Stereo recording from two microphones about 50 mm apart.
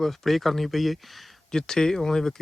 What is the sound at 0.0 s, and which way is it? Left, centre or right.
Speech, centre.